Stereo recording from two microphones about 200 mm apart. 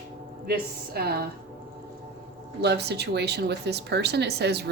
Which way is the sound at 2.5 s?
55° right (ahead or behind).